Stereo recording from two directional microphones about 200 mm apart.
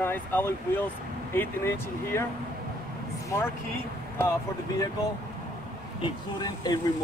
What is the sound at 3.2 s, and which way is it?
Speech, 15° left (ahead or behind).